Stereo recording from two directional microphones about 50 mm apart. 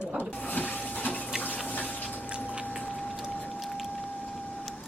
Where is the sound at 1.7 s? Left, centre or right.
Left.